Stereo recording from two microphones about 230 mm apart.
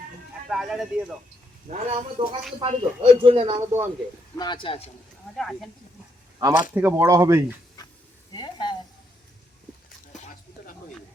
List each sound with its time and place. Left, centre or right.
0.4 s speech: centre
1.6 s speech: right
4.4 s speech: centre
5.4 s speech: centre
6.4 s speech: centre
7.8 s a sound: centre